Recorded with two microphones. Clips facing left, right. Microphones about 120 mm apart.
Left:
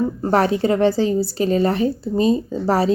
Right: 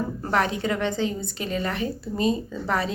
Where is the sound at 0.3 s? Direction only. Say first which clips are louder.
Left 7 dB; 35° left (ahead or behind).